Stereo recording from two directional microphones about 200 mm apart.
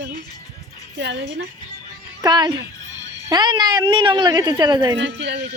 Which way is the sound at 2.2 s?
20° right (ahead or behind).